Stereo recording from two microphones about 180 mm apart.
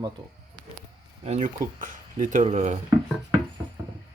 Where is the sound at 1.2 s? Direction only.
40° right (ahead or behind).